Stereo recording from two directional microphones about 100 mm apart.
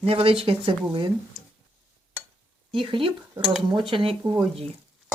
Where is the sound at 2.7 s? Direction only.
60° right (ahead or behind).